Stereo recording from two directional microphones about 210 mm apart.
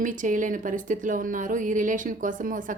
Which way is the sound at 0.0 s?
40° right (ahead or behind).